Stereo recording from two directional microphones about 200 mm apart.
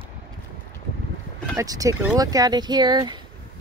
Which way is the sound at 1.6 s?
15° right (ahead or behind).